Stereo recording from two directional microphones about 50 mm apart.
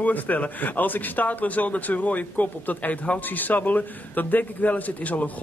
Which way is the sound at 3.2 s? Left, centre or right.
Left.